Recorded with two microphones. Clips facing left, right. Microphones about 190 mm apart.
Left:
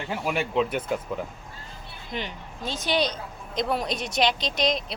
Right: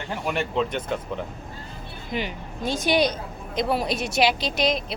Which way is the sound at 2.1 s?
10° right (ahead or behind).